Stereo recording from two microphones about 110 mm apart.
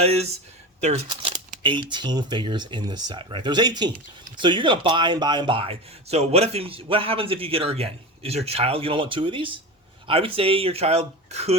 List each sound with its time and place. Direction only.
0.0 s speech: 70° right (ahead or behind)
0.8 s speech: 90° right
1.0 s speech: 50° right (ahead or behind); by 11.5 s 80° right